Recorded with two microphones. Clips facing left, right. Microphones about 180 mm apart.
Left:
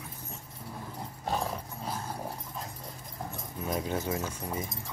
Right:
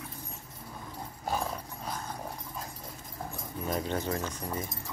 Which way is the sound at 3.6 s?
5° left (ahead or behind).